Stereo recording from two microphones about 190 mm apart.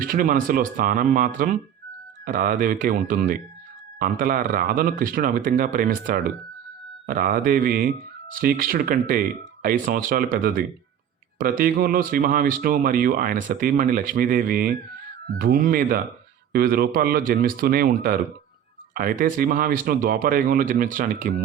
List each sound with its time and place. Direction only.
0.0 s speech: 45° right (ahead or behind)